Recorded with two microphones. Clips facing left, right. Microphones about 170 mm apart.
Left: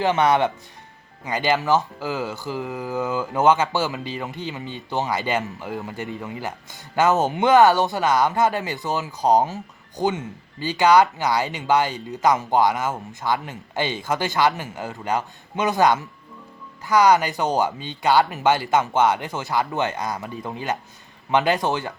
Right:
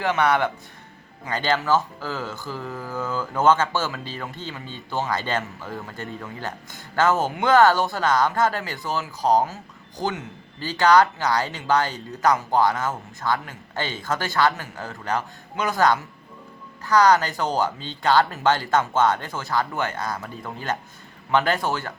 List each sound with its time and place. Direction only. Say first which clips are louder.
0.0 s speech: left 2 dB; 20° left (ahead or behind)